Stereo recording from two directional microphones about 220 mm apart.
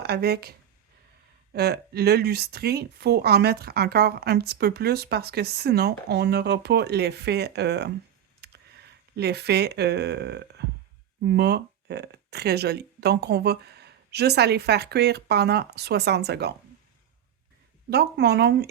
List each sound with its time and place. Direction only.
0.0 s a woman's voice: 45° right (ahead or behind)
1.5 s a woman's voice: 45° right (ahead or behind)
17.9 s a woman's voice: 50° right (ahead or behind)